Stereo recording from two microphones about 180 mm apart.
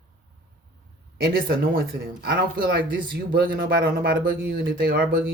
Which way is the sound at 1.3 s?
55° right (ahead or behind).